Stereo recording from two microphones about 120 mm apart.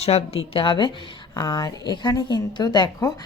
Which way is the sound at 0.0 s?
55° left (ahead or behind).